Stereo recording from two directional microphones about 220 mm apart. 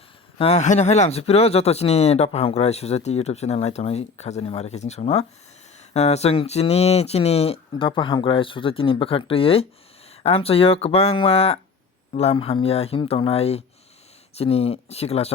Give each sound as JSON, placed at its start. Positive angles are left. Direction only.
{"t": 0.3, "sound": "speech", "side_deg": 30}